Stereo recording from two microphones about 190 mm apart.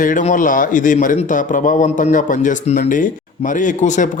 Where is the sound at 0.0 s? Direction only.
40° left (ahead or behind).